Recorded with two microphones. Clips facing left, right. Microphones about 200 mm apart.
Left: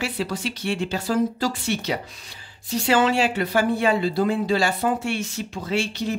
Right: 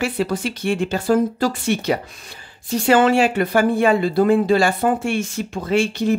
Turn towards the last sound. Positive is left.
turn(degrees=-50)  # may be behind; listen again after turning